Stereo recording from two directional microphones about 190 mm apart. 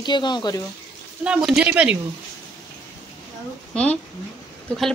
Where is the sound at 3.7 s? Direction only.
5° left (ahead or behind).